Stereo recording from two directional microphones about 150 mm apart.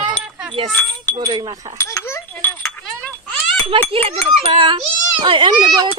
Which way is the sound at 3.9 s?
40° right (ahead or behind).